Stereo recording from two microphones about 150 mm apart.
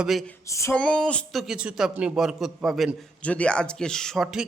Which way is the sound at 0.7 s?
5° left (ahead or behind).